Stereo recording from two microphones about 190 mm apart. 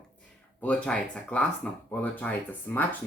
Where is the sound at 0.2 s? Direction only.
5° left (ahead or behind).